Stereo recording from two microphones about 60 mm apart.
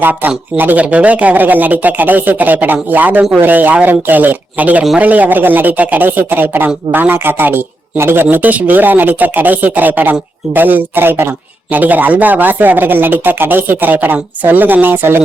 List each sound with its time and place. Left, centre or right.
0.0 s speech: right